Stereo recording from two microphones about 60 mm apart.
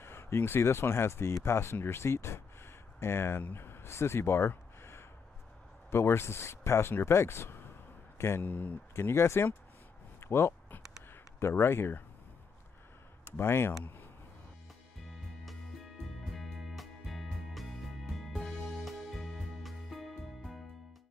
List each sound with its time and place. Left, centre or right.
0.0 s speech: left
8.5 s speech: left
8.9 s speech: left
13.2 s speech: left
16.3 s music: centre